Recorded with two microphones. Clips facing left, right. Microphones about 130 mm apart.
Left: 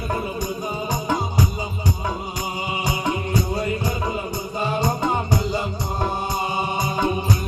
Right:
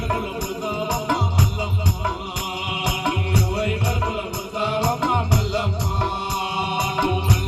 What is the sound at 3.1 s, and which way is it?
Music, 70° right (ahead or behind).